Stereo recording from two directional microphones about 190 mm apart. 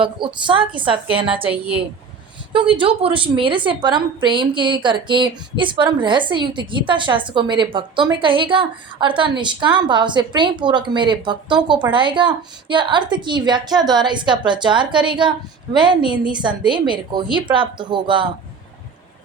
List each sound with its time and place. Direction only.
0.0 s a woman's voice: 25° right (ahead or behind)
1.5 s a woman's voice: 5° right (ahead or behind)
2.5 s a woman's voice: 25° right (ahead or behind)